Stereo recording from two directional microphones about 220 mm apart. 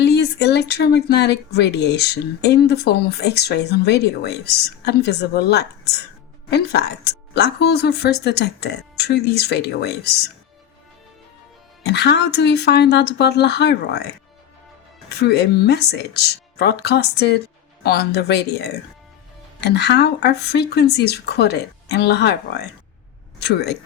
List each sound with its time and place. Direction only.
0.0 s speech: 50° left (ahead or behind)
11.9 s speech: 50° left (ahead or behind)
15.2 s speech: 50° left (ahead or behind)